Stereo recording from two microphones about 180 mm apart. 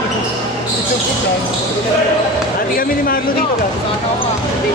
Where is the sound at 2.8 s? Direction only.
55° left (ahead or behind).